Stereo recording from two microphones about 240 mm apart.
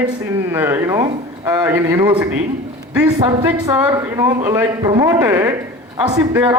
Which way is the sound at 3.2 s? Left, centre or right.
Centre.